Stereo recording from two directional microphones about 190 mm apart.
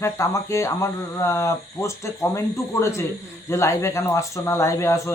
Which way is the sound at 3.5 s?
15° left (ahead or behind).